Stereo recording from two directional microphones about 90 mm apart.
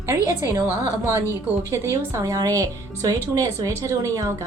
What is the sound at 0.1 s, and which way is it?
Speech, 35° right (ahead or behind).